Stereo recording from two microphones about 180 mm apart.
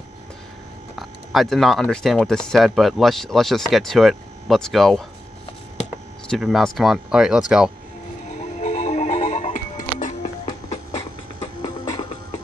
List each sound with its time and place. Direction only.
0.9 s speech: centre (ahead or behind)
6.3 s speech: centre (ahead or behind)
8.4 s music: 40° left (ahead or behind)
11.3 s music: 25° left (ahead or behind)